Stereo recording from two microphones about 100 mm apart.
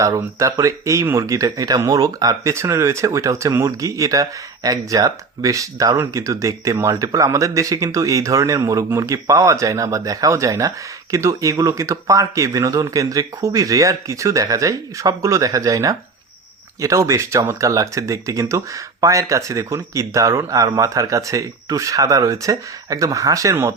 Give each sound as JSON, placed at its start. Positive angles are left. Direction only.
{"t": 0.0, "sound": "speech", "side_deg": -30}